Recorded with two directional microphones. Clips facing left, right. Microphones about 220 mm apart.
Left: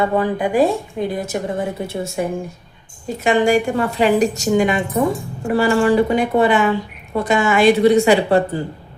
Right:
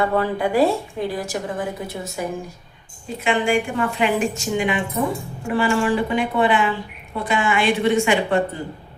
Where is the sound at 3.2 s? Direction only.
40° left (ahead or behind).